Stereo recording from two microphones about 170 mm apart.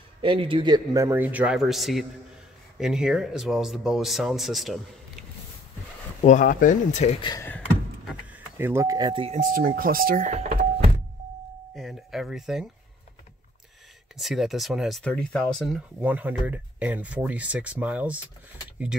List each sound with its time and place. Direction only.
0.2 s speech: 30° right (ahead or behind); by 4.7 s centre (ahead or behind)
6.2 s speech: 50° left (ahead or behind)
7.2 s speech: 25° left (ahead or behind)
8.1 s speech: 10° right (ahead or behind); by 9.3 s 25° right (ahead or behind)
9.3 s speech: 50° right (ahead or behind)
11.7 s speech: centre (ahead or behind)
14.1 s speech: centre (ahead or behind)